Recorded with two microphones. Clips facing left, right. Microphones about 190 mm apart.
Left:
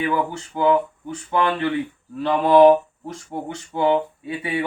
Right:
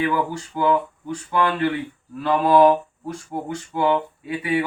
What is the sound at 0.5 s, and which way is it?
Speech, 25° left (ahead or behind).